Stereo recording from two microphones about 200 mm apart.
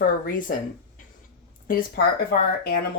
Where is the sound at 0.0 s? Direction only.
40° left (ahead or behind).